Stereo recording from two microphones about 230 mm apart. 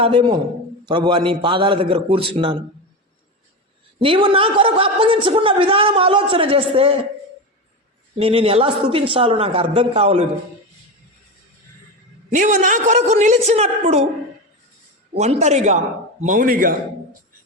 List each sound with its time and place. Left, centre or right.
0.0 s a man's voice: right
4.0 s a man's voice: right
8.2 s a man's voice: right
12.3 s a man's voice: right
15.2 s a man's voice: right